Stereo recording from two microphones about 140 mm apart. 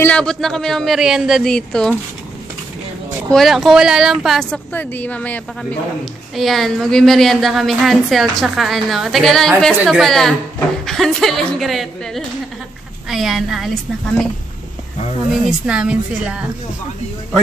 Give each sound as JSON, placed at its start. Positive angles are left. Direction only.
{"t": 0.0, "sound": "a woman's voice", "side_deg": 10}
{"t": 3.3, "sound": "a woman's voice", "side_deg": 0}
{"t": 15.6, "sound": "a woman's voice", "side_deg": -5}